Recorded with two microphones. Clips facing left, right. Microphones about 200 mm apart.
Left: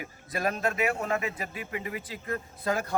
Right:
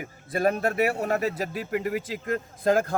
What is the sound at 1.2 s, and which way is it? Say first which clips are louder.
Speech: right 7 dB; 75° right (ahead or behind).